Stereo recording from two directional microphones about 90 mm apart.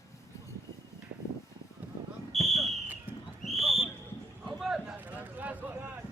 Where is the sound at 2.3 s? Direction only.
Centre (ahead or behind).